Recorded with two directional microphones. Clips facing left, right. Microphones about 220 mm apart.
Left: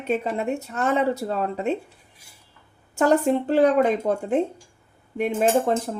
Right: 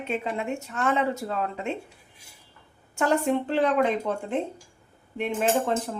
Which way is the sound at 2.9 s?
40° left (ahead or behind).